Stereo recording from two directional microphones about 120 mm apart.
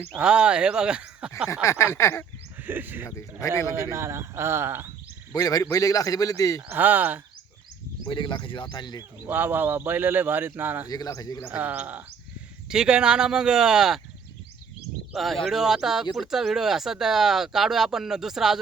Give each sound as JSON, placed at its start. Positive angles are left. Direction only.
{"t": 0.1, "sound": "speech", "side_deg": -5}
{"t": 1.6, "sound": "speech", "side_deg": 20}
{"t": 2.6, "sound": "speech", "side_deg": -15}
{"t": 5.3, "sound": "speech", "side_deg": 30}
{"t": 6.7, "sound": "speech", "side_deg": -15}
{"t": 8.0, "sound": "speech", "side_deg": 40}
{"t": 9.2, "sound": "speech", "side_deg": -15}
{"t": 10.8, "sound": "speech", "side_deg": 30}
{"t": 11.5, "sound": "speech", "side_deg": -10}
{"t": 15.1, "sound": "speech", "side_deg": 0}